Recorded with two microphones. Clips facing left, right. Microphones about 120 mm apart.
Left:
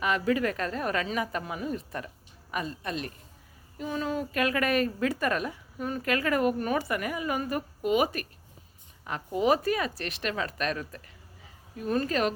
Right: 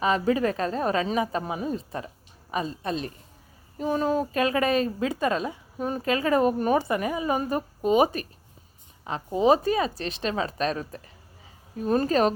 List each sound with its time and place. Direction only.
0.0 s speech: 30° right (ahead or behind)
3.8 s speech: 40° right (ahead or behind)